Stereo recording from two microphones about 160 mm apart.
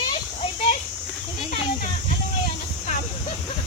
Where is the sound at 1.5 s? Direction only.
55° left (ahead or behind).